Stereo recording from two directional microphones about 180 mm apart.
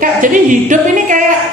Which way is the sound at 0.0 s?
45° right (ahead or behind).